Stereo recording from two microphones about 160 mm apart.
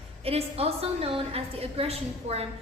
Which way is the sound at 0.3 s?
40° right (ahead or behind).